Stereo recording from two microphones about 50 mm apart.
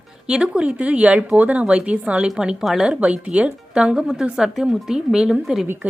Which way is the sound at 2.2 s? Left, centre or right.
Centre.